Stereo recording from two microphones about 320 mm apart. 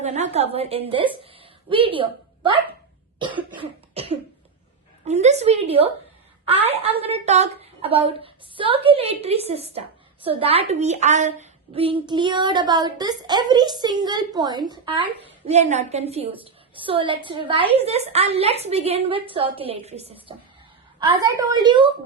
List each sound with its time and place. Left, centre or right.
0.0 s a woman's voice: centre
3.2 s cough: centre
5.0 s a woman's voice: right